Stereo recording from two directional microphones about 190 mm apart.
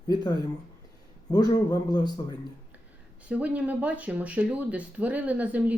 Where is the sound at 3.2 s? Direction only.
10° right (ahead or behind).